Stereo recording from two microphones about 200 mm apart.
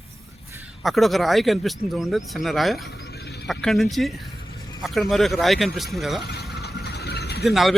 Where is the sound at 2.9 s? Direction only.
55° left (ahead or behind).